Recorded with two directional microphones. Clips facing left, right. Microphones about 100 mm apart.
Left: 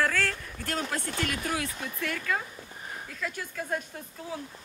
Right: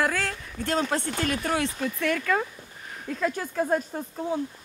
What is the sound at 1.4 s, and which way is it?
Speech, 65° right (ahead or behind).